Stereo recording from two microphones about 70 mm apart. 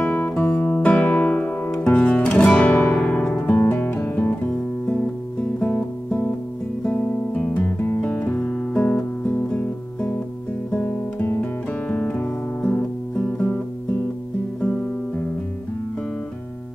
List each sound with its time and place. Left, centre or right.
0.0 s music: left
10.7 s guitar: centre
11.9 s music: centre
14.6 s music: centre